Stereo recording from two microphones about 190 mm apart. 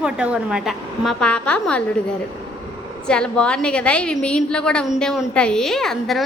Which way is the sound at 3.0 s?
5° left (ahead or behind).